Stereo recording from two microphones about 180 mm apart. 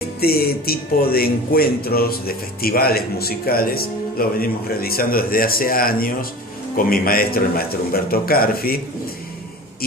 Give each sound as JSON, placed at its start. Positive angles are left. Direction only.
{"t": 0.2, "sound": "a man's voice", "side_deg": 55}